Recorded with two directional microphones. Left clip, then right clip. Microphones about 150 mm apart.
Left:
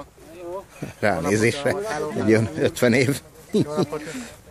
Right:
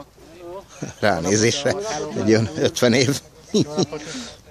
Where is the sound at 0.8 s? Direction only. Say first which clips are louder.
Right 3 dB; 10° right (ahead or behind).